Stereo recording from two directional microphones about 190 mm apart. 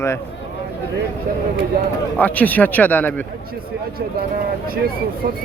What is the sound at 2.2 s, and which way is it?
Speech, 10° left (ahead or behind).